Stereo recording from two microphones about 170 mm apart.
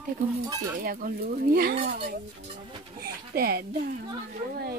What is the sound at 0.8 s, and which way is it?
Speech, 60° right (ahead or behind).